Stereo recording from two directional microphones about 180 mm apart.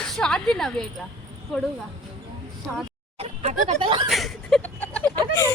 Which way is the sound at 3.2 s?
35° right (ahead or behind).